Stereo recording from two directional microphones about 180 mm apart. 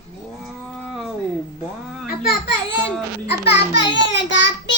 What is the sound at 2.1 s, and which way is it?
Baby cry, 55° left (ahead or behind).